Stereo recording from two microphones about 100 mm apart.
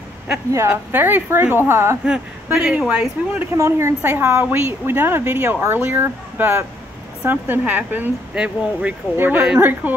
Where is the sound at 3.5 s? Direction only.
30° right (ahead or behind).